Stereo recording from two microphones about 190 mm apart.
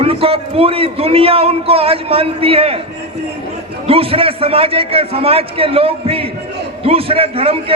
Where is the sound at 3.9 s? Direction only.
30° right (ahead or behind).